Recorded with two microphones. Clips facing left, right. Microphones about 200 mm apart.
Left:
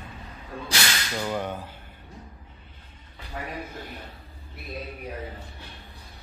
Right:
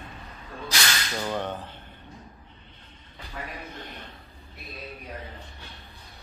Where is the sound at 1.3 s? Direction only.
10° left (ahead or behind).